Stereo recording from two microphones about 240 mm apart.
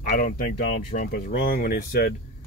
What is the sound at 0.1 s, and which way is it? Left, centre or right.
Speech, left.